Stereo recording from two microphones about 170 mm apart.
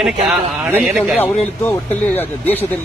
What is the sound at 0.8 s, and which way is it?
Speech, centre (ahead or behind).